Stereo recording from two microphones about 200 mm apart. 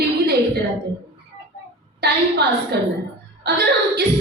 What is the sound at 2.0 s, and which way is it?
Speech, 55° right (ahead or behind).